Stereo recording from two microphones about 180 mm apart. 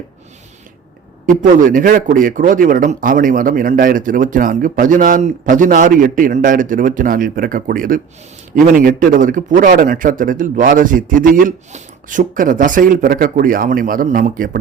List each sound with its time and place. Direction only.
1.4 s speech: 45° right (ahead or behind)